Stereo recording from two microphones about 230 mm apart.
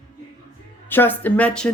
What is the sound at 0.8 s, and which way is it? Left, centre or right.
Speech, centre.